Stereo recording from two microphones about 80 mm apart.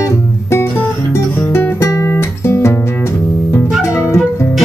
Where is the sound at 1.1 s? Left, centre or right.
Left.